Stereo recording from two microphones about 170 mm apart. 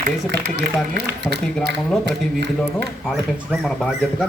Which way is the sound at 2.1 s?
90° right.